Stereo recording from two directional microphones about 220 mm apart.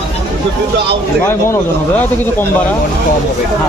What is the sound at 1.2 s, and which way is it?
Speech, 10° left (ahead or behind).